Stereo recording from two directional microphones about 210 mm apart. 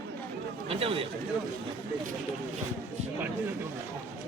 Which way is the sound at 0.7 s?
25° right (ahead or behind).